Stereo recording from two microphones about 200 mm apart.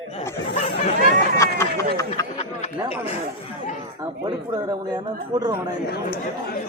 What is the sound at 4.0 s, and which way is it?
Speech, 20° right (ahead or behind).